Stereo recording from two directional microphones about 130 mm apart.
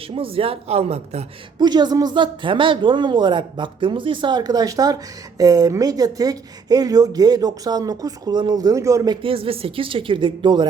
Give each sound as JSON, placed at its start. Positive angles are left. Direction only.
{"t": 0.2, "sound": "speech", "side_deg": -45}
{"t": 1.5, "sound": "speech", "side_deg": -35}
{"t": 9.2, "sound": "speech", "side_deg": -45}